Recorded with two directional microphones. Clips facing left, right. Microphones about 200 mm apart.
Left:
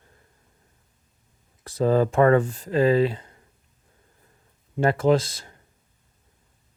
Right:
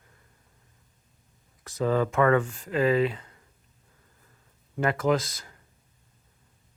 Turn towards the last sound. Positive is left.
turn(degrees=30)  # may be behind; listen again after turning